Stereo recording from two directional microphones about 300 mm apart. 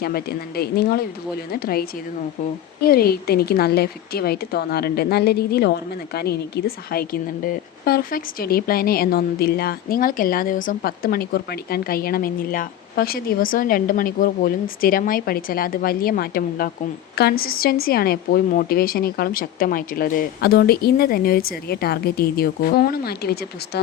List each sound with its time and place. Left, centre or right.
0.0 s a woman's voice: left